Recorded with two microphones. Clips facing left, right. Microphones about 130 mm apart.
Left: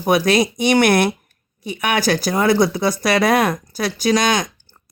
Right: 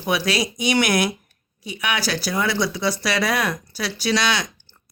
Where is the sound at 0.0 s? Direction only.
45° left (ahead or behind).